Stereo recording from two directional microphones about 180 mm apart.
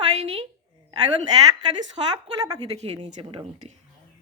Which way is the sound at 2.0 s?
30° right (ahead or behind).